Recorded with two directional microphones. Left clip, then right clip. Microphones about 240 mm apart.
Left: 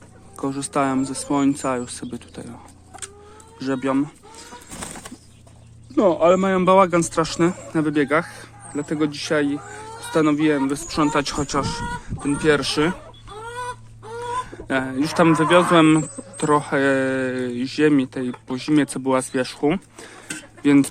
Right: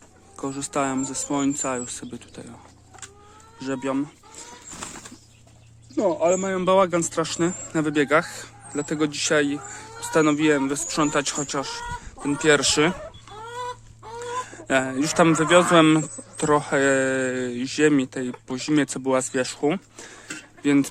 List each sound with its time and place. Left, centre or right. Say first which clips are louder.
0.3 s speech: left 4 dB; centre
3.6 s chicken: left 4 dB; centre
6.0 s speech: left 5 dB; centre
7.7 s a man's voice: right 3 dB; centre
12.3 s a man's voice: even; centre
13.5 s chicken: left 2 dB; left
14.5 s a man's voice: right 1 dB; centre